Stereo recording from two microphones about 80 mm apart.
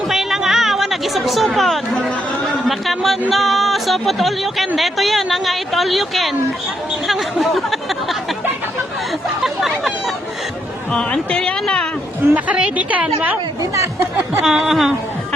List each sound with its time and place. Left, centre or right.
0.1 s chatter: centre
2.4 s speech: centre
9.4 s chatter: centre
10.9 s speech: centre
12.3 s a woman's voice: centre
14.4 s speech: centre